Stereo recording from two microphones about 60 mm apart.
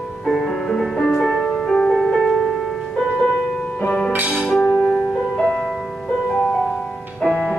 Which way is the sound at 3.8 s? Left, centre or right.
Centre.